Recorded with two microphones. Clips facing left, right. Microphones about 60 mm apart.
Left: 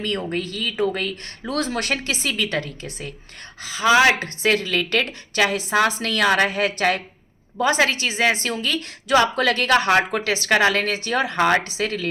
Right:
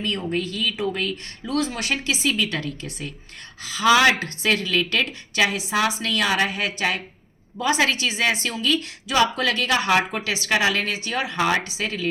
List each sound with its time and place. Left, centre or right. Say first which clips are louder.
0.0 s a woman's voice: even; left